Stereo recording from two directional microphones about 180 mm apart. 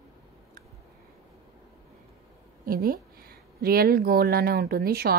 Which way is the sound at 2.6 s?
55° right (ahead or behind).